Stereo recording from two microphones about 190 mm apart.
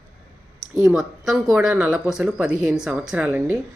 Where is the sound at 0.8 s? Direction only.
Centre (ahead or behind).